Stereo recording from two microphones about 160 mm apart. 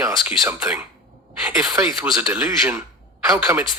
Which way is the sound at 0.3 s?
15° right (ahead or behind).